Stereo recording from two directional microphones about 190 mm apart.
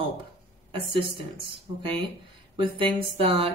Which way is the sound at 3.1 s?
30° right (ahead or behind).